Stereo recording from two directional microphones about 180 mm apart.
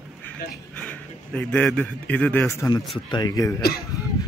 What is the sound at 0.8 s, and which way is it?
A man's voice, 5° left (ahead or behind).